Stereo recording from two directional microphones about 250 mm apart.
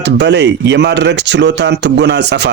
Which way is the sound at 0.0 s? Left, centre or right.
Right.